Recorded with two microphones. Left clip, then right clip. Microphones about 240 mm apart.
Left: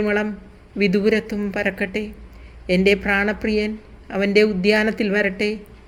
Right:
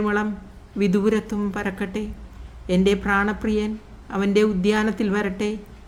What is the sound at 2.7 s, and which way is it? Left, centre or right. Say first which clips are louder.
Speech: left 3 dB; right.